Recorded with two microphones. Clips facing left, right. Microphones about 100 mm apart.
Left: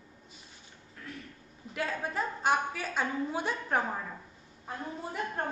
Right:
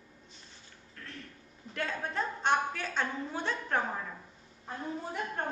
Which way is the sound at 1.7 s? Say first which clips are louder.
Left 1 dB; 5° left (ahead or behind).